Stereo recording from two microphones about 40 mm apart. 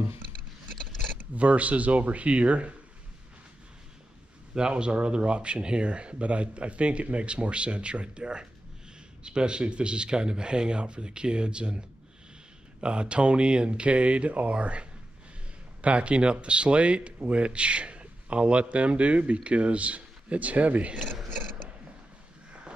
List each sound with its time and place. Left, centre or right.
1.3 s speech: right
4.6 s speech: right
12.8 s speech: right